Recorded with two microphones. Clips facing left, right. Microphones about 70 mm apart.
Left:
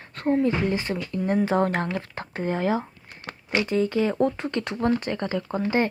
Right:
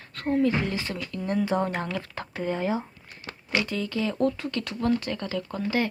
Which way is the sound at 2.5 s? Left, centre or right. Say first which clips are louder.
Left 4 dB; left.